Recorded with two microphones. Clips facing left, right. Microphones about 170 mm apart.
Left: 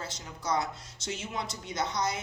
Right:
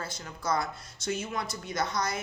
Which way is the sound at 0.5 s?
25° left (ahead or behind).